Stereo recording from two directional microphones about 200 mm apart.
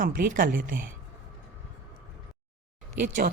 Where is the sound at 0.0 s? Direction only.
45° right (ahead or behind).